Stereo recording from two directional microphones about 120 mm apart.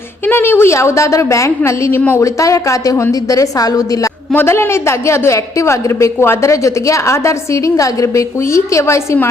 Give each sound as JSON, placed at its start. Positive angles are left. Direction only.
{"t": 0.3, "sound": "a woman's voice", "side_deg": 20}
{"t": 4.3, "sound": "a woman's voice", "side_deg": 20}